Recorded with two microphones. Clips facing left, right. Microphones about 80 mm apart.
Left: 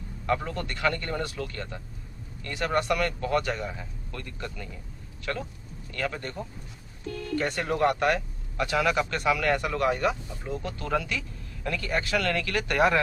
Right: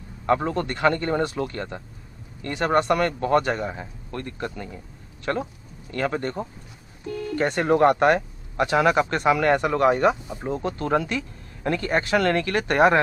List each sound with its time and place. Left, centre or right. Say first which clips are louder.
0.3 s speech: right 6 dB; right
7.1 s speech: right 4 dB; centre
7.3 s speech: right 7 dB; right